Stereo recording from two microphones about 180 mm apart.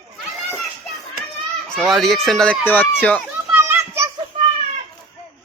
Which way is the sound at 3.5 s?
10° right (ahead or behind).